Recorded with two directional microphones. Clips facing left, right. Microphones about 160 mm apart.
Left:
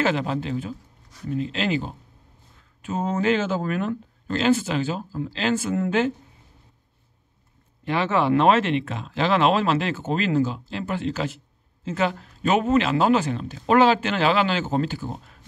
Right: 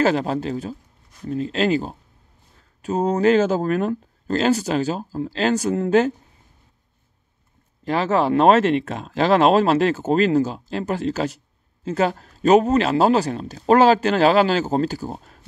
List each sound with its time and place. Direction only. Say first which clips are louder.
0.0 s speech: right 4 dB; 40° right (ahead or behind)
7.8 s speech: right 3 dB; 40° right (ahead or behind)